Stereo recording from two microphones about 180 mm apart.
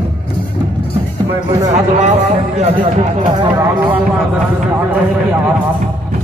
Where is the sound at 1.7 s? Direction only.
40° right (ahead or behind).